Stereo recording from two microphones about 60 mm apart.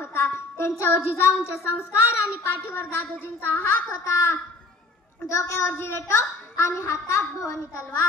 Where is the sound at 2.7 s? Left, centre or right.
Left.